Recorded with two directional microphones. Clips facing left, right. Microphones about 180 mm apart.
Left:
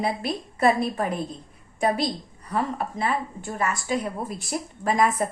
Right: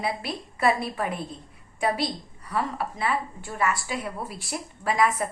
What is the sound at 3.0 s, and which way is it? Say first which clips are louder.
A woman's voice: left 1 dB; 45° left (ahead or behind).